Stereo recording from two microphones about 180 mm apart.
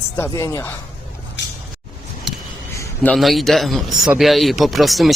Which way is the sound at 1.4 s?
75° left (ahead or behind).